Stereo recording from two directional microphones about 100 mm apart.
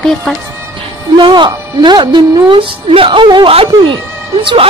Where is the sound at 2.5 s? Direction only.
65° right (ahead or behind).